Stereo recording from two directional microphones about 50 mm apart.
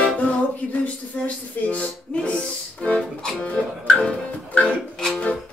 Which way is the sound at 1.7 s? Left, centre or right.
Left.